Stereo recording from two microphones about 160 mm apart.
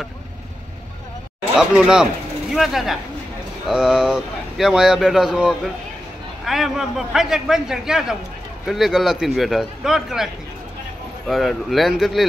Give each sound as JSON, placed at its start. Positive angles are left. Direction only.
{"t": 1.6, "sound": "speech", "side_deg": -5}